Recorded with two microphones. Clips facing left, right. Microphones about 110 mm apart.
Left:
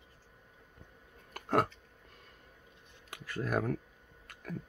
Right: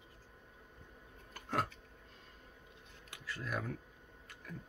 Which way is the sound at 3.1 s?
50° left (ahead or behind).